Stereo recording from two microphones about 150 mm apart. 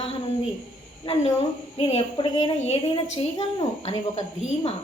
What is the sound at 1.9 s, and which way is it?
A woman's voice, 40° left (ahead or behind).